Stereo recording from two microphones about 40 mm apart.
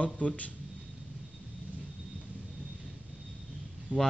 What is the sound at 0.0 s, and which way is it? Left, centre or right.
Speech, left.